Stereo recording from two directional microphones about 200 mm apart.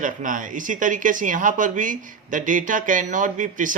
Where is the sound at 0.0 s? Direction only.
40° right (ahead or behind).